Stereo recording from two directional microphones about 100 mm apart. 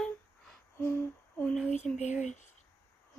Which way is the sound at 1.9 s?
10° left (ahead or behind).